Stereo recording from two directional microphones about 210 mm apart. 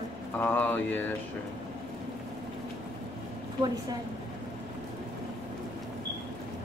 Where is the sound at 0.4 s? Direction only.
10° left (ahead or behind).